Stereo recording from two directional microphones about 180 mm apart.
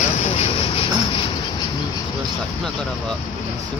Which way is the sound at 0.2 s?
35° left (ahead or behind).